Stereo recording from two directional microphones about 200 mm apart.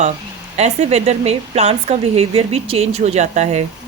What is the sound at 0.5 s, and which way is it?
A woman's voice, 35° right (ahead or behind).